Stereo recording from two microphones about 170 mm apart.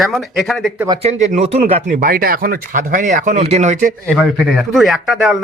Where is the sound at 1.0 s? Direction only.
40° right (ahead or behind).